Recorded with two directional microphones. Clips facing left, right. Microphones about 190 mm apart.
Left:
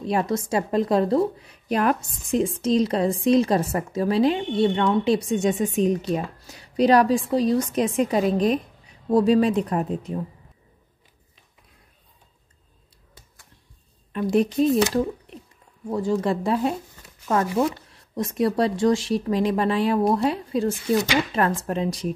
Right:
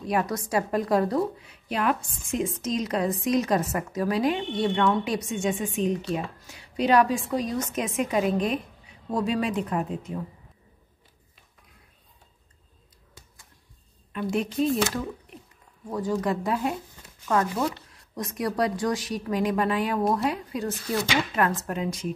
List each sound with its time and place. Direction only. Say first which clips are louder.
0.0 s speech: left 3 dB; 25° left (ahead or behind)
1.4 s a woman's voice: left 5 dB; 40° left (ahead or behind)
14.1 s a woman's voice: left 7 dB; 35° left (ahead or behind)
15.9 s speech: left 4 dB; 25° left (ahead or behind)
20.7 s speech: left 6 dB; 15° left (ahead or behind)
21.4 s speech: left 3 dB; 30° left (ahead or behind)